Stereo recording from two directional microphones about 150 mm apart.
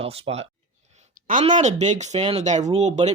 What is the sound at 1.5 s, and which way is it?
Speech, 55° right (ahead or behind).